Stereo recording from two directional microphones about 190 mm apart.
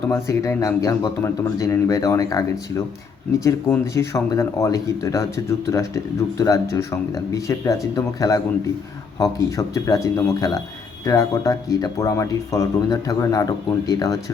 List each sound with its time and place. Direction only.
0.1 s speech: 15° left (ahead or behind)
3.9 s speech: 15° left (ahead or behind)